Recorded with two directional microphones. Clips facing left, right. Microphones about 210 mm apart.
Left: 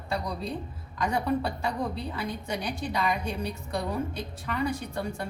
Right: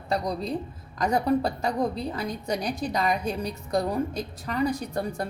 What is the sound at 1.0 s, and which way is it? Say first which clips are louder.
A woman's voice: right 4 dB; 40° right (ahead or behind).